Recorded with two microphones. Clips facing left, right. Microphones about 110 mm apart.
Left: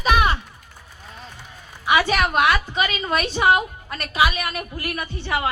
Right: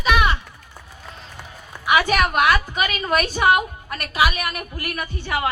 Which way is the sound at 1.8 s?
30° left (ahead or behind).